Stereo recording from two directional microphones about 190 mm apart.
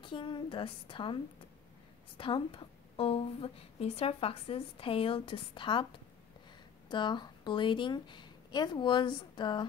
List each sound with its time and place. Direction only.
0.0 s a woman's voice: 25° left (ahead or behind)
6.9 s a woman's voice: 25° left (ahead or behind)